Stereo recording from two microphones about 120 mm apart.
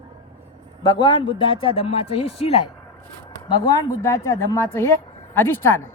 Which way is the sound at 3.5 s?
30° left (ahead or behind).